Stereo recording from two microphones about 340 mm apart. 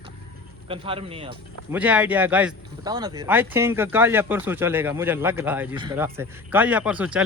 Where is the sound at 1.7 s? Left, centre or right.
Centre.